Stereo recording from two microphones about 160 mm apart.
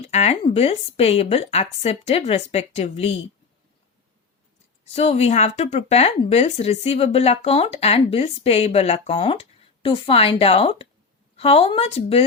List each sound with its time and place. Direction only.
0.1 s a woman's voice: 40° left (ahead or behind)
4.9 s a woman's voice: 40° left (ahead or behind)